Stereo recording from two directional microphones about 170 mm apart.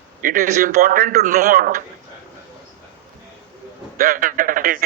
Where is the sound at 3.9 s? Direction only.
55° right (ahead or behind).